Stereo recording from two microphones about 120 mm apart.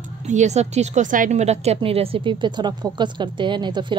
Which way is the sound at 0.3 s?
75° right (ahead or behind).